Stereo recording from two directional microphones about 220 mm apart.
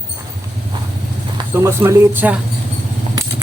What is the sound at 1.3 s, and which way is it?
Speech, 10° right (ahead or behind).